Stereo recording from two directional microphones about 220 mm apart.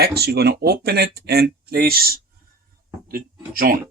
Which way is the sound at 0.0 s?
45° right (ahead or behind).